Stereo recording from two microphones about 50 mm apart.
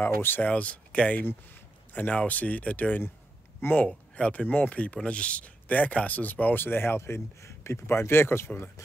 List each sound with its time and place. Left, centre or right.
0.0 s speech: left
0.5 s speech: left
3.6 s speech: left
4.5 s speech: left
7.0 s speech: left